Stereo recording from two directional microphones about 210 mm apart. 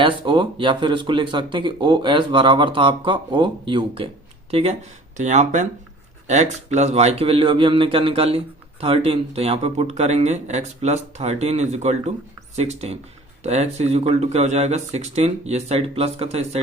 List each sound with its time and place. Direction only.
0.0 s speech: 25° right (ahead or behind)